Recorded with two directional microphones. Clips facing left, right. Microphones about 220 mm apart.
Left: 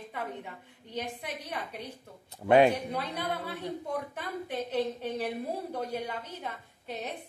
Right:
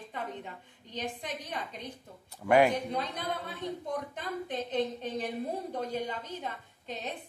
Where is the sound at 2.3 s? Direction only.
20° left (ahead or behind).